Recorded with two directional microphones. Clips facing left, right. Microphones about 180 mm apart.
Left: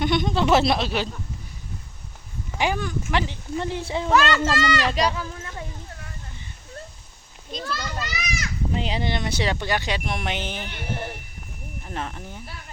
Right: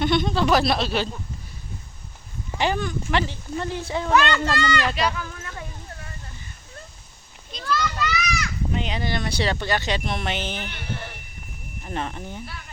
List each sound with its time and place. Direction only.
0.0 s speech: 15° left (ahead or behind)
2.6 s speech: 10° left (ahead or behind)
3.6 s speech: 25° left (ahead or behind)
4.1 s speech: 10° left (ahead or behind)
4.9 s speech: 30° left (ahead or behind)
7.6 s children playing: 30° left (ahead or behind)
7.9 s speech: 40° left (ahead or behind); by 10.8 s 15° left (ahead or behind)
11.9 s speech: centre (ahead or behind)